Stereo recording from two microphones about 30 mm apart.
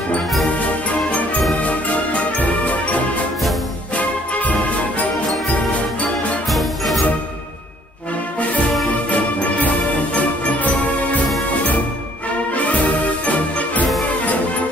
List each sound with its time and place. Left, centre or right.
1.6 s music: left
3.9 s music: left
6.5 s music: centre
9.1 s music: left
12.5 s music: left